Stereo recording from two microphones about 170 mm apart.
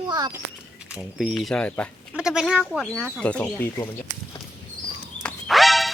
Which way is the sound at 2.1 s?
5° right (ahead or behind).